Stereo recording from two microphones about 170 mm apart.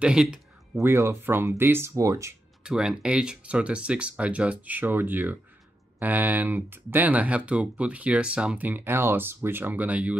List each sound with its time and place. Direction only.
0.0 s speech: 5° right (ahead or behind)
0.9 s speech: 15° right (ahead or behind)
2.6 s speech: 5° right (ahead or behind)